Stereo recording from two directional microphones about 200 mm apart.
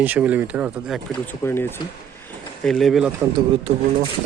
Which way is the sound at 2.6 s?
Centre (ahead or behind).